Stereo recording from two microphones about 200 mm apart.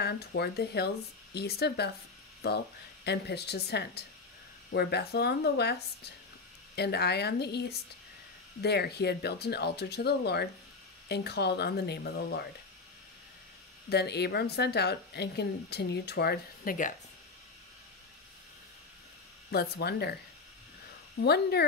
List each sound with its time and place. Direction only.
0.0 s a woman's voice: 55° left (ahead or behind)
13.8 s a woman's voice: 55° left (ahead or behind)
19.5 s speech: 55° left (ahead or behind)
21.2 s a woman's voice: 55° left (ahead or behind)